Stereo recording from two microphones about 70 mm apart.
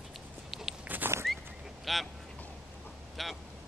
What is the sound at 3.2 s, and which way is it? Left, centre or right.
Speech, centre.